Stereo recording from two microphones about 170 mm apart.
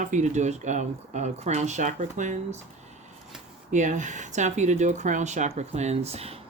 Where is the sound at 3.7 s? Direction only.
45° right (ahead or behind).